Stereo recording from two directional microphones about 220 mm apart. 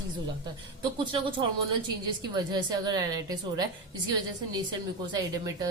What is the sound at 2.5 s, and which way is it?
A woman's voice, 20° right (ahead or behind).